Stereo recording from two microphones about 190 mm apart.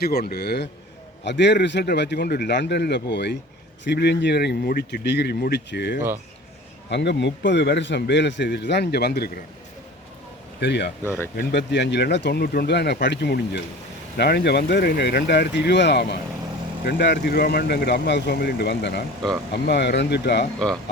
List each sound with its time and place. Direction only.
0.0 s a man's voice: 55° left (ahead or behind)
10.6 s a man's voice: 60° left (ahead or behind)